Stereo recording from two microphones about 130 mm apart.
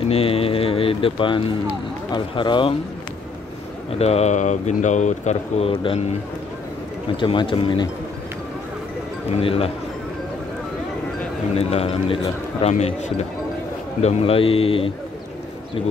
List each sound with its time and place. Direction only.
0.1 s a sound: 45° left (ahead or behind)
2.1 s speech: 35° left (ahead or behind)
4.0 s speech: 55° left (ahead or behind)
7.2 s speech: 40° left (ahead or behind)
9.3 s a man's voice: 50° left (ahead or behind)
11.5 s a man's voice: 50° left (ahead or behind)